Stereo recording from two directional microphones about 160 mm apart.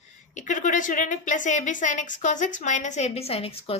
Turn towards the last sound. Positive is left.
turn(degrees=35)  # may be behind; listen again after turning